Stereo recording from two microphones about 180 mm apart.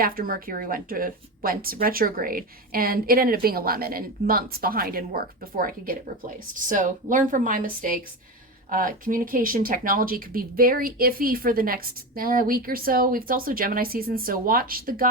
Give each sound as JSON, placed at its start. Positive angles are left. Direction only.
{"t": 0.0, "sound": "speech", "side_deg": -55}